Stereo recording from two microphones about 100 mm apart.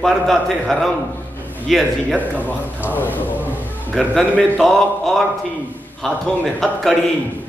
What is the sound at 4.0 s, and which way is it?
A man's voice, 5° left (ahead or behind).